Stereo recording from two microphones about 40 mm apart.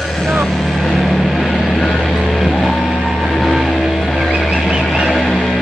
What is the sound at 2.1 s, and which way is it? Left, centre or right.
Music, centre.